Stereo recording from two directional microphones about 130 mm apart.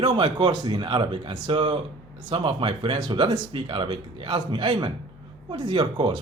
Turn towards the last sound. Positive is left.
turn(degrees=-40)  # may be behind; listen again after turning